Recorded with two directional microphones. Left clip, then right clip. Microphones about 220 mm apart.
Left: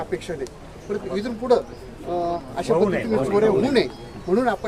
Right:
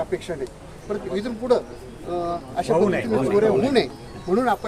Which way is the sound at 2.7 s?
25° right (ahead or behind).